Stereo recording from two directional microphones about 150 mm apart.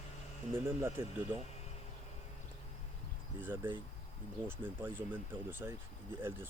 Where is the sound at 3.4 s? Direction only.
15° right (ahead or behind).